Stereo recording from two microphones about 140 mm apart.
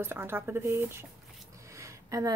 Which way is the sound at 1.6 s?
20° right (ahead or behind).